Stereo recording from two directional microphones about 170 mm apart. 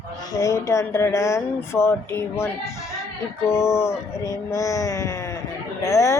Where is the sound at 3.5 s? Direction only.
15° left (ahead or behind).